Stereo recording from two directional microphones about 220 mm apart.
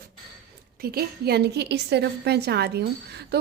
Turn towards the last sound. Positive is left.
turn(degrees=-45)  # may be behind; listen again after turning